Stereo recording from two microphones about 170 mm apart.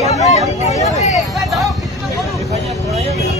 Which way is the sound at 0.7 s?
40° left (ahead or behind).